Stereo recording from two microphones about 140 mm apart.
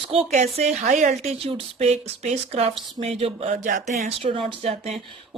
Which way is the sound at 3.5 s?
70° right (ahead or behind).